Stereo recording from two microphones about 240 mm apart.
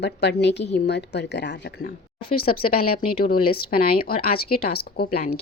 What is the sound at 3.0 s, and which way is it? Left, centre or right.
Speech, left.